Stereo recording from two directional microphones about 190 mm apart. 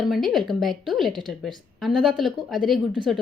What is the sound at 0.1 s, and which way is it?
A woman's voice, centre (ahead or behind).